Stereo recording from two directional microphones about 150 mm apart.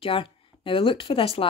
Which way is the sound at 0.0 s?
35° left (ahead or behind).